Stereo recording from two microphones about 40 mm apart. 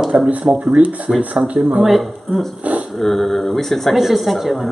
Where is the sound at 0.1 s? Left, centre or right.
Right.